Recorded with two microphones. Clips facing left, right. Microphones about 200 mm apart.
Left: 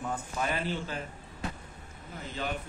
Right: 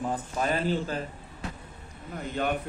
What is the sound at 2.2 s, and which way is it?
Speech, 55° right (ahead or behind).